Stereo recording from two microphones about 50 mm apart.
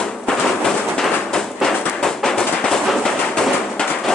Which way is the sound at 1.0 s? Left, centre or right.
Centre.